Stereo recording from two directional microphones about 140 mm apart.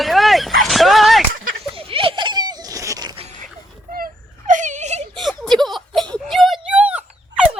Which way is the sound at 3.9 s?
80° right.